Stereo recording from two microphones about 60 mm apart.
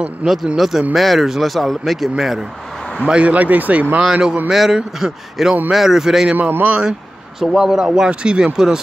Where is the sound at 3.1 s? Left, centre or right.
Right.